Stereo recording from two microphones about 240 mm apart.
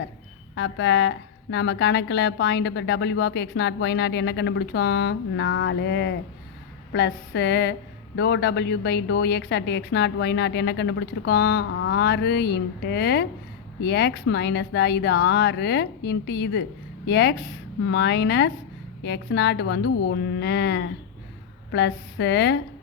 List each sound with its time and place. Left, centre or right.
0.5 s speech: left